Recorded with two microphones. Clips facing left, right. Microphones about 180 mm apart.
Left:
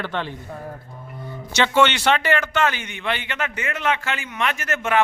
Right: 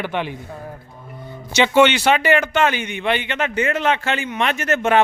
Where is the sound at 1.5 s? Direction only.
15° right (ahead or behind).